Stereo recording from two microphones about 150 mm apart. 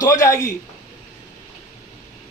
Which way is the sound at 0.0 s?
20° left (ahead or behind).